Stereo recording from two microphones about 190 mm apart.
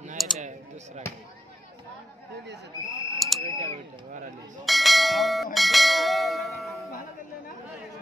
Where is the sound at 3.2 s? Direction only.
Centre (ahead or behind).